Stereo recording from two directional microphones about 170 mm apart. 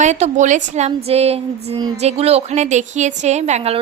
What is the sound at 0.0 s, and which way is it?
A woman's voice, 45° right (ahead or behind).